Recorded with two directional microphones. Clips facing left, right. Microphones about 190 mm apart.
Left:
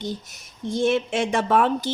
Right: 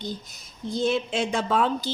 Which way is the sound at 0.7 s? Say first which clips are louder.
Left 3 dB; 75° left (ahead or behind).